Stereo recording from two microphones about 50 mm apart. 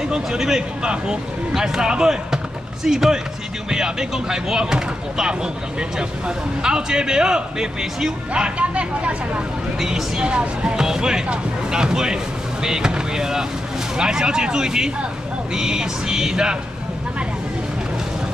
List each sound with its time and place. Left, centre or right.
0.1 s speech: centre
8.3 s speech: right
9.8 s speech: centre